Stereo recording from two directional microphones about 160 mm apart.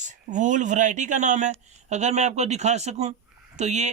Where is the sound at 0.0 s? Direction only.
50° right (ahead or behind).